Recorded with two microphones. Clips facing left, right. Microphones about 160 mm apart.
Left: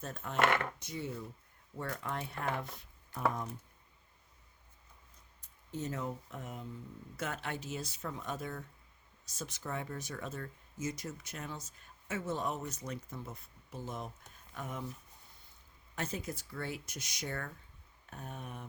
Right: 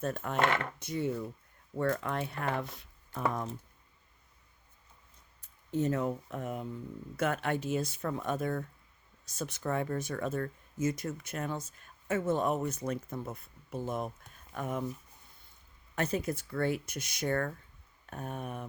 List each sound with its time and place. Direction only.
0.0 s speech: 60° right (ahead or behind); by 3.5 s 80° right
5.7 s speech: 60° right (ahead or behind)
16.0 s speech: 60° right (ahead or behind)